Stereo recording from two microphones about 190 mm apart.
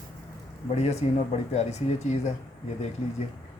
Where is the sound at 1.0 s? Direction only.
35° left (ahead or behind).